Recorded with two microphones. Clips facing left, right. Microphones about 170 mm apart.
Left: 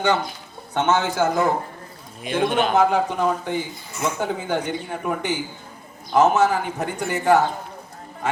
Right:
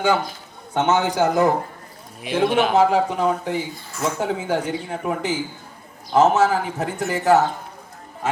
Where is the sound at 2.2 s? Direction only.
5° right (ahead or behind).